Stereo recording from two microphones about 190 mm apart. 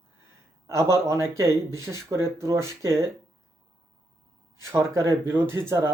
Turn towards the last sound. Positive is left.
turn(degrees=-15)  # may be behind; listen again after turning